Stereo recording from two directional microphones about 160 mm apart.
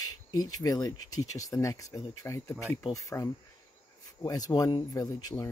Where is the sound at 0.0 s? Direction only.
20° left (ahead or behind).